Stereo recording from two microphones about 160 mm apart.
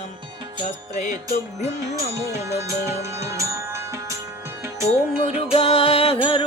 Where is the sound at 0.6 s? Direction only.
50° left (ahead or behind).